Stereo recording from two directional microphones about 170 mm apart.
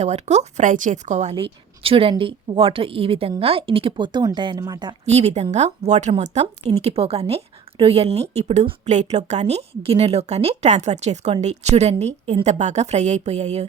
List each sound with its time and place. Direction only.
0.0 s a woman's voice: 40° right (ahead or behind); by 4.9 s 25° right (ahead or behind)
5.0 s a woman's voice: 40° right (ahead or behind)